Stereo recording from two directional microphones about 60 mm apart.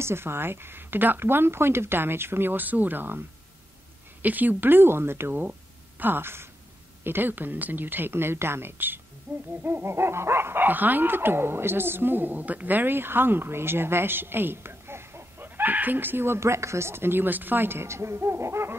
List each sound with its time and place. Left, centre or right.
0.0 s speech: right